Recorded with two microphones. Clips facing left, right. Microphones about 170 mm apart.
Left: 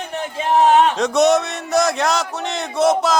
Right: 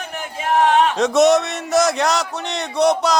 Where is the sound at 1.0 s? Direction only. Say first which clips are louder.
Right 1 dB; centre (ahead or behind).